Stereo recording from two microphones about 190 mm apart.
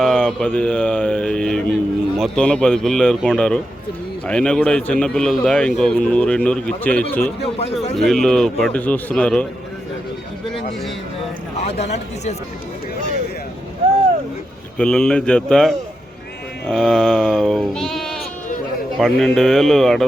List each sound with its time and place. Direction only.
0.0 s speech: centre (ahead or behind)
7.6 s speech: 30° left (ahead or behind)
7.9 s speech: centre (ahead or behind)
11.8 s speech: 35° left (ahead or behind)
14.8 s speech: 5° left (ahead or behind)
16.6 s bleat: 5° left (ahead or behind)
18.9 s speech: centre (ahead or behind)